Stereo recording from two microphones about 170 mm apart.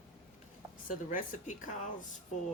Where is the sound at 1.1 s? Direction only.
50° left (ahead or behind).